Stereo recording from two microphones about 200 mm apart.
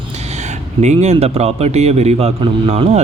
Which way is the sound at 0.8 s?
35° right (ahead or behind).